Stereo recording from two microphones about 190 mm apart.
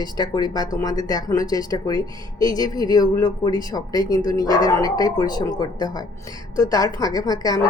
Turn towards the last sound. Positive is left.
turn(degrees=20)  # may be behind; listen again after turning